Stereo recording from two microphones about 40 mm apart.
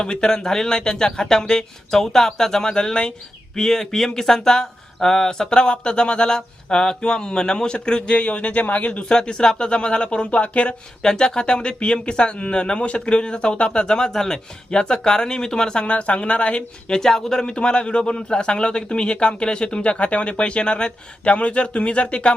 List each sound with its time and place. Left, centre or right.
0.0 s a man's voice: centre
11.0 s a man's voice: centre
15.9 s a man's voice: left
17.0 s a man's voice: centre; by 22.4 s left